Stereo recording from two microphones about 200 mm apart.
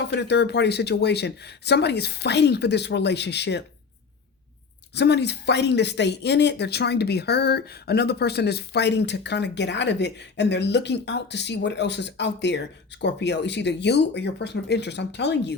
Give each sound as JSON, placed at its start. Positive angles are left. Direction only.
{"t": 0.1, "sound": "speech", "side_deg": 60}
{"t": 4.9, "sound": "speech", "side_deg": 55}